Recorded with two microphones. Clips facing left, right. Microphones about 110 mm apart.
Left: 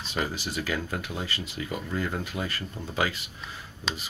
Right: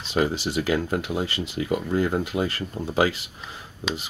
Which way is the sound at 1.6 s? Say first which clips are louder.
Right 9 dB; 40° right (ahead or behind).